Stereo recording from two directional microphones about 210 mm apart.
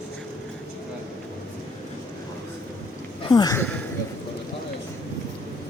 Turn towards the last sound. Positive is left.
turn(degrees=10)  # may be behind; listen again after turning